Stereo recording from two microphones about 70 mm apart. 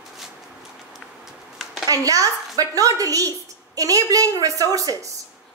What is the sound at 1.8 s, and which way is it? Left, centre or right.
A woman's voice, right.